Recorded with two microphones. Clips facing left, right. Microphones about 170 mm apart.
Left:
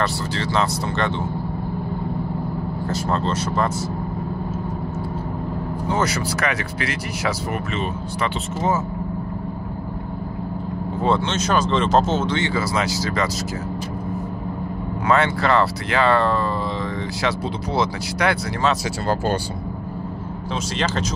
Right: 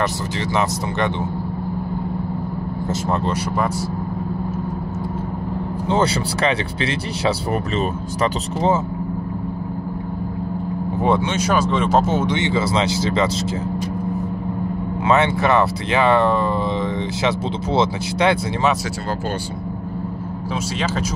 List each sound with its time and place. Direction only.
0.0 s speech: 15° right (ahead or behind)
2.9 s speech: 15° right (ahead or behind)
5.9 s speech: 30° right (ahead or behind)
11.0 s speech: 15° right (ahead or behind)
15.0 s speech: 20° right (ahead or behind)
17.7 s speech: 25° right (ahead or behind)